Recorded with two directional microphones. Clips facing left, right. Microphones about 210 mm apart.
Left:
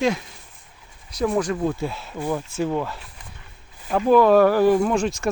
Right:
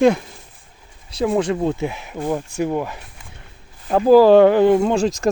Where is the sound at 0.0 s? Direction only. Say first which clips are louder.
Right 7 dB; 55° right (ahead or behind).